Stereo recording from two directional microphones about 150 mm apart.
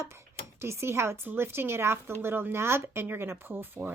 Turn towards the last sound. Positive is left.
turn(degrees=-15)  # may be behind; listen again after turning